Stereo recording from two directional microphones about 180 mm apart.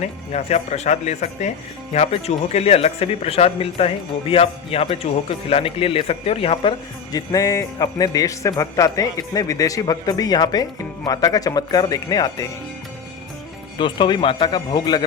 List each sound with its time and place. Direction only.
0.0 s speech: 40° left (ahead or behind); by 12.5 s 20° left (ahead or behind)
13.7 s speech: 25° left (ahead or behind)